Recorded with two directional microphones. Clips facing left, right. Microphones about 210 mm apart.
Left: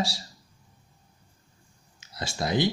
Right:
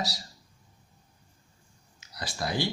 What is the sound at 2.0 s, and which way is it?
Speech, 25° left (ahead or behind).